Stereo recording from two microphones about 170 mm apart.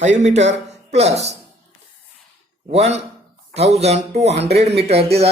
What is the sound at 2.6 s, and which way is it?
Speech, 40° right (ahead or behind).